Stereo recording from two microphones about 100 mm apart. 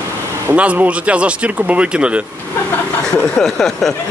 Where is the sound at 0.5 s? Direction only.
15° right (ahead or behind).